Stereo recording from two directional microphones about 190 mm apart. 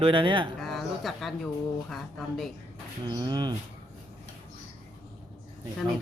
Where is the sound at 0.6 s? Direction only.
Centre (ahead or behind).